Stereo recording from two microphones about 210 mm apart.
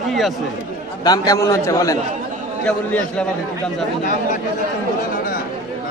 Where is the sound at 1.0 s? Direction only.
15° left (ahead or behind).